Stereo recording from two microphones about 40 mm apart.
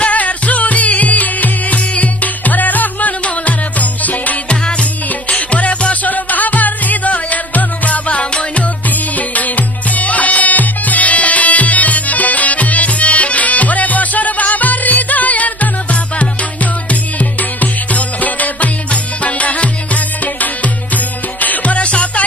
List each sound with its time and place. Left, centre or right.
0.0 s music: left
4.4 s music: left
8.9 s music: left